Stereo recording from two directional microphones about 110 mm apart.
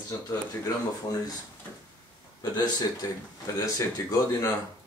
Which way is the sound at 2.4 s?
35° left (ahead or behind).